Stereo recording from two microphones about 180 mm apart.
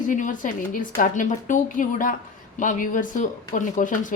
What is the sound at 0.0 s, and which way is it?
A woman's voice, 45° left (ahead or behind).